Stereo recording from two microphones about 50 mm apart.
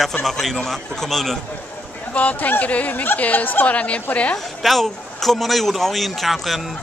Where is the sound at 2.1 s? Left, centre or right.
Left.